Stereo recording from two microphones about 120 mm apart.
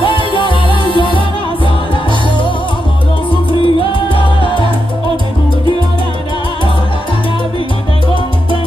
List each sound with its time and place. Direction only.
0.0 s music: 45° left (ahead or behind)
3.6 s salsa music: 45° left (ahead or behind)
4.4 s salsa music: 45° right (ahead or behind)